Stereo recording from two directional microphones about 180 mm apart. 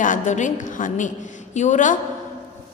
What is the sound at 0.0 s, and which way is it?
A woman's voice, 45° left (ahead or behind).